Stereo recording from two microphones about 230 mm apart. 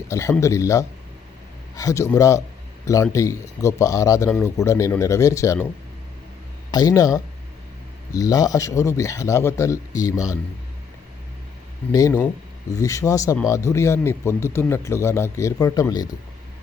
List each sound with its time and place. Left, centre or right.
0.1 s speech: centre
6.7 s speech: centre
11.9 s speech: centre